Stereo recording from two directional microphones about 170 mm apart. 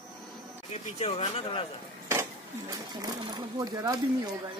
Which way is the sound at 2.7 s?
25° right (ahead or behind).